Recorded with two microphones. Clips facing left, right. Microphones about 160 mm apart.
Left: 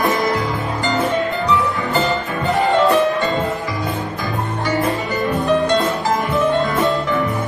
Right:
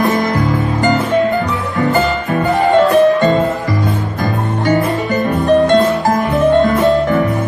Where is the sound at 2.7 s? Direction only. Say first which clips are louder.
Right 6 dB; 50° right (ahead or behind).